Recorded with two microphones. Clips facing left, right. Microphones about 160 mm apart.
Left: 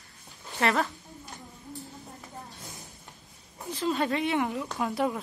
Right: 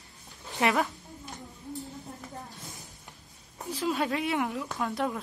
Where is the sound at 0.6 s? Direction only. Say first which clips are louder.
Even; 10° right (ahead or behind).